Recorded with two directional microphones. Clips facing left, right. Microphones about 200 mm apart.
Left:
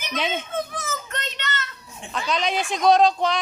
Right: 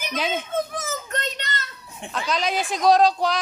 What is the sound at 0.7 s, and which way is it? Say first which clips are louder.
Child singing: right 2 dB; 45° right (ahead or behind).